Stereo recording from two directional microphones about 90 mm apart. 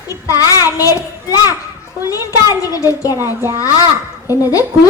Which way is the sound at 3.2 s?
30° right (ahead or behind).